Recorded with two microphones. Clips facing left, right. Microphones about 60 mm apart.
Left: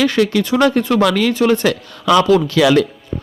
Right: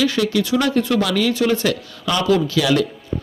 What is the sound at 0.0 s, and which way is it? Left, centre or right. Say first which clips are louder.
A man's voice: left 4 dB; left.